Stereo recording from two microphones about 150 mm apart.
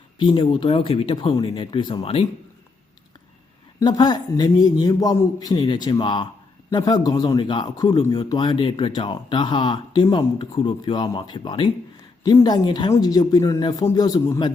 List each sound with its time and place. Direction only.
0.2 s a man's voice: 35° left (ahead or behind)
3.8 s a man's voice: 30° left (ahead or behind)